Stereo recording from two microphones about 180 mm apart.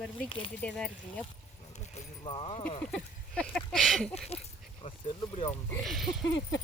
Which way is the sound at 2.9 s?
Centre (ahead or behind).